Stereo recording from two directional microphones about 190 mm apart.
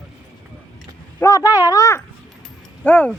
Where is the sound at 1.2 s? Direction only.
15° left (ahead or behind).